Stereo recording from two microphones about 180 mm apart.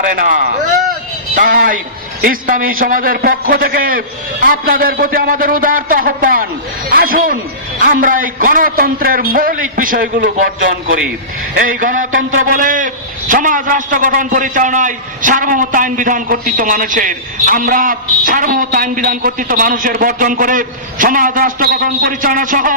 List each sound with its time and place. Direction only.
0.1 s a man's voice: 50° right (ahead or behind)